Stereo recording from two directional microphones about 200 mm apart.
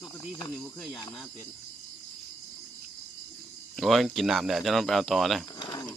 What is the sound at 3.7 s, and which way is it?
Speech, centre (ahead or behind).